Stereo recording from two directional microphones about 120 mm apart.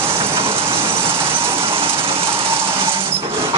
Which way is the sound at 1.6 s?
50° right (ahead or behind).